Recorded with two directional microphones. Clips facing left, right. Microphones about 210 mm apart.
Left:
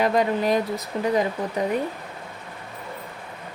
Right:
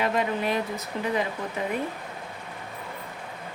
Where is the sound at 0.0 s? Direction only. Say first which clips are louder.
Left 5 dB; 40° left (ahead or behind).